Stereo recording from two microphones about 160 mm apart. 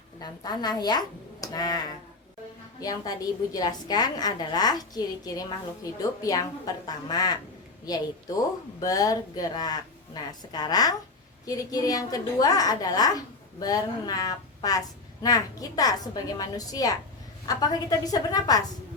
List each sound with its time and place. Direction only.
0.2 s a woman's voice: 25° left (ahead or behind)
2.8 s a woman's voice: 20° left (ahead or behind)
8.8 s a woman's voice: 20° left (ahead or behind)